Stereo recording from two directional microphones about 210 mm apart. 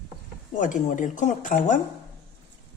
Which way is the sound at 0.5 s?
35° left (ahead or behind).